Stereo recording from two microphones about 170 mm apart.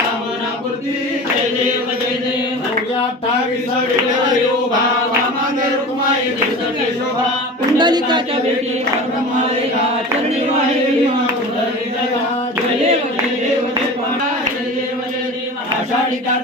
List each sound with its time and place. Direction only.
7.7 s speech: 25° right (ahead or behind)